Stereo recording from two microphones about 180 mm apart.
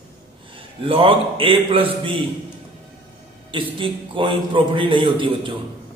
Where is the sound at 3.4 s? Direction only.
30° right (ahead or behind).